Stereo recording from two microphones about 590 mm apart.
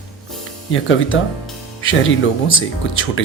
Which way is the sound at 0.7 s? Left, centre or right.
Centre.